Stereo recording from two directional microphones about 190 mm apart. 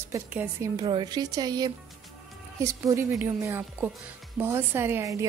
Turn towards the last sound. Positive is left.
turn(degrees=-15)  # may be behind; listen again after turning